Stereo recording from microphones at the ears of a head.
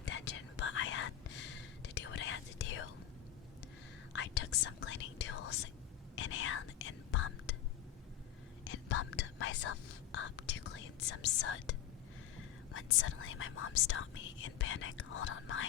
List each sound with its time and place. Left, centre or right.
0.0 s whispering: left
4.1 s whispering: left
8.6 s whispering: left